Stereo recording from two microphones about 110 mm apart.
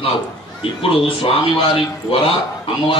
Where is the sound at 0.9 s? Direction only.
55° left (ahead or behind).